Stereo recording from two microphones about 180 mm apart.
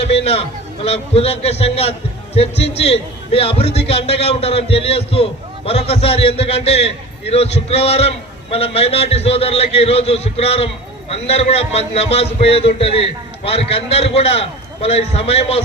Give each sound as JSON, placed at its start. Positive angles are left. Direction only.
{"t": 0.1, "sound": "a man's voice", "side_deg": 35}